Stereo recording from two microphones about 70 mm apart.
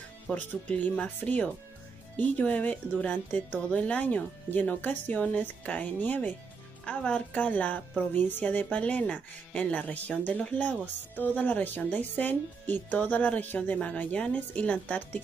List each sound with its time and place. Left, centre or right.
0.3 s speech: centre